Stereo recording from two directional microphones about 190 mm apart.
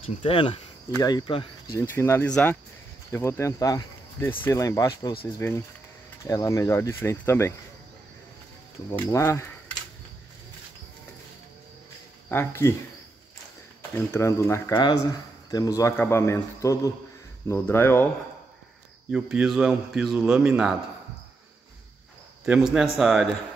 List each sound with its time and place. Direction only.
0.0 s speech: 25° left (ahead or behind)
1.7 s speech: 15° left (ahead or behind)
8.9 s speech: 10° left (ahead or behind)
12.3 s speech: 10° left (ahead or behind)
13.9 s speech: 15° left (ahead or behind)
19.0 s a man's voice: 5° right (ahead or behind)
22.4 s a man's voice: centre (ahead or behind)